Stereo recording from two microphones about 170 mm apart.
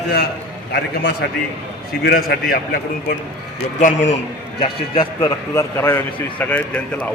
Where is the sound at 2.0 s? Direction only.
65° left (ahead or behind).